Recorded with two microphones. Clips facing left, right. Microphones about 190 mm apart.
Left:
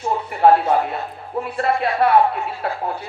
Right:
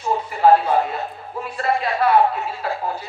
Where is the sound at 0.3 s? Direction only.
60° left (ahead or behind).